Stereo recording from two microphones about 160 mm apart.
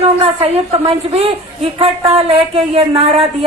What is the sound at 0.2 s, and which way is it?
Speech, 35° right (ahead or behind).